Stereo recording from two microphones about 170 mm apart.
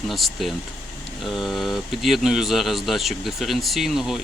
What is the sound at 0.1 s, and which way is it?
Speech, centre (ahead or behind).